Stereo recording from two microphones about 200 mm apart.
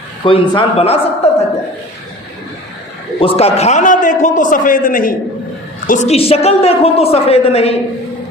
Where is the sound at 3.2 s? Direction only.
30° left (ahead or behind).